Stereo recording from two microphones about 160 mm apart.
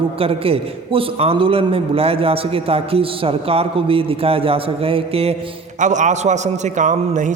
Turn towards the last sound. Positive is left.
turn(degrees=-50)  # may be behind; listen again after turning